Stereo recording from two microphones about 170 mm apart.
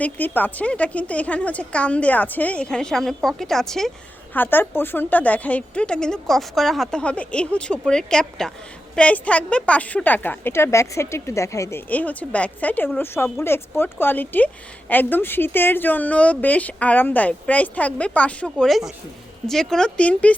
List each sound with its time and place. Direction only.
0.0 s a woman's voice: 10° left (ahead or behind)